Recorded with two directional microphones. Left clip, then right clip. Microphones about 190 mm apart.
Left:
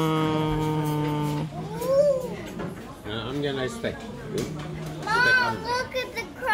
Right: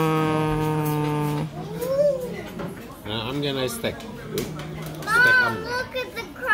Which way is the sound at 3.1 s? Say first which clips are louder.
Right 2 dB; 55° right (ahead or behind).